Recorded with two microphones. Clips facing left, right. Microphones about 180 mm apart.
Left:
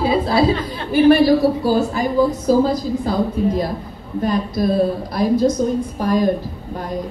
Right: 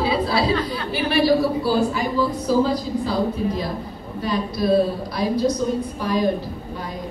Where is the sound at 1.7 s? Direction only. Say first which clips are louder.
Left 3 dB; 45° left (ahead or behind).